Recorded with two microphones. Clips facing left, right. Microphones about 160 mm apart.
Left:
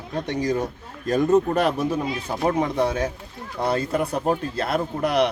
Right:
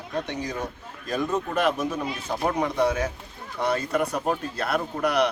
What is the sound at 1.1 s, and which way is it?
Speech, 40° left (ahead or behind).